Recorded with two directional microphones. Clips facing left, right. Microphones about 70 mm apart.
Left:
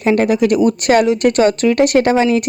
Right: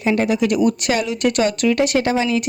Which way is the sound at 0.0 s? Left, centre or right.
Left.